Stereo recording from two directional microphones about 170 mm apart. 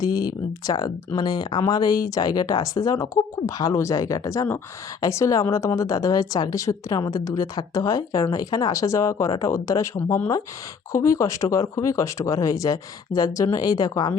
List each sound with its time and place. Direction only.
0.0 s speech: 20° left (ahead or behind)